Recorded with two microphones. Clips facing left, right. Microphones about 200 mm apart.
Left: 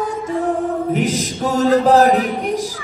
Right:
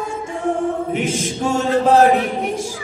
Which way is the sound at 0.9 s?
40° left (ahead or behind).